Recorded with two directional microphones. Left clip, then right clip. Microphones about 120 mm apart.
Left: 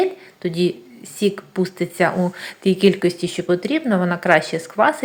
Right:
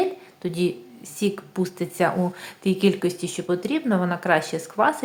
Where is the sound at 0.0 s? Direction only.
10° left (ahead or behind).